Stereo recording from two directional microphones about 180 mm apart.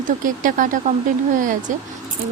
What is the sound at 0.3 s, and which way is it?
Speech, 45° right (ahead or behind).